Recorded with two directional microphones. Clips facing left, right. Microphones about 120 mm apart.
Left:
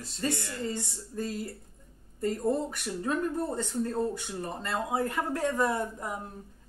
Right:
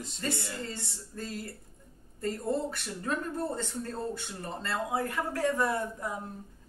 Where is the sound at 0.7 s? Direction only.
20° left (ahead or behind).